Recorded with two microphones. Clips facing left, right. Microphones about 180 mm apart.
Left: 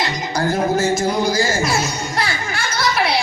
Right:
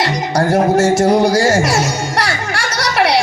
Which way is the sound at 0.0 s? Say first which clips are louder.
Right 5 dB; 80° right.